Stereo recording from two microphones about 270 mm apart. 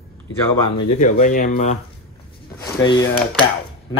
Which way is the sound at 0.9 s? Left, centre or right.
Left.